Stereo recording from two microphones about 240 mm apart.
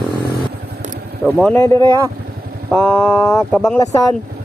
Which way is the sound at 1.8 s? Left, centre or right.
Centre.